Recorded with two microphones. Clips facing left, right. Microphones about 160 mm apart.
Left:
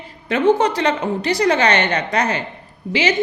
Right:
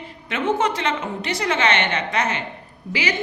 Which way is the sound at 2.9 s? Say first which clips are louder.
Left 6 dB; 25° left (ahead or behind).